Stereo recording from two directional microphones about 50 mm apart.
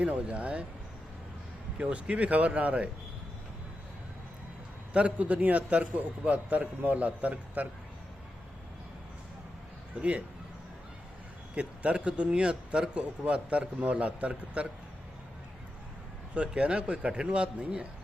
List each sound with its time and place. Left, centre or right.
0.0 s speech: right
1.8 s speech: right
4.9 s speech: right
9.9 s speech: right
11.5 s speech: right
16.3 s speech: right